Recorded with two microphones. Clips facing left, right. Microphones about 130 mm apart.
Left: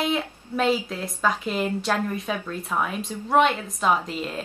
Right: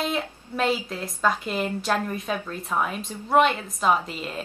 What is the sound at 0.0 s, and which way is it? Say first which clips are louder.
A woman's voice: left 2 dB; centre (ahead or behind).